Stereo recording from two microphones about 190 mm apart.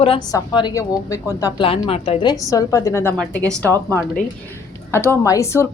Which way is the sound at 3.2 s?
5° left (ahead or behind).